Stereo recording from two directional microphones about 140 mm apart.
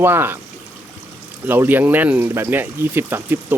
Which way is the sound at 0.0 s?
15° right (ahead or behind).